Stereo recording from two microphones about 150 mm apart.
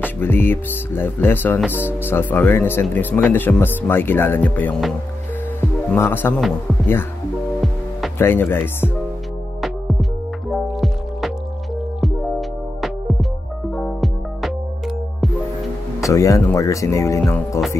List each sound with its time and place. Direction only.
0.0 s speech: 15° left (ahead or behind)
5.9 s speech: 15° left (ahead or behind)
8.2 s speech: 15° left (ahead or behind)
9.6 s music: centre (ahead or behind)
16.1 s speech: 20° left (ahead or behind)